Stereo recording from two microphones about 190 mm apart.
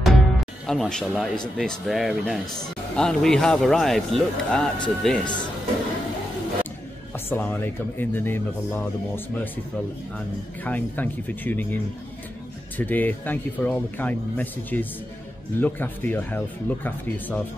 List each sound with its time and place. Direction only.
0.0 s music: centre (ahead or behind)
1.6 s speech: centre (ahead or behind)
7.2 s a man's voice: 10° left (ahead or behind)